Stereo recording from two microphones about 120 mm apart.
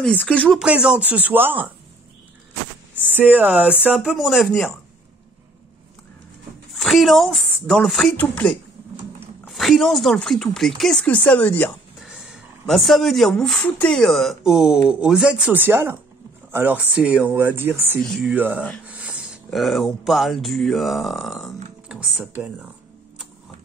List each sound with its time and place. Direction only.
0.0 s speech: 10° left (ahead or behind)
0.6 s speech: 5° right (ahead or behind)
2.9 s speech: 15° right (ahead or behind)
6.7 s speech: centre (ahead or behind)
9.5 s speech: centre (ahead or behind)
12.0 s a sound: 5° right (ahead or behind)
13.7 s speech: 15° left (ahead or behind)
13.9 s speech: centre (ahead or behind); by 17.9 s 20° right (ahead or behind)
17.9 s speech: centre (ahead or behind)
18.3 s speech: 15° right (ahead or behind)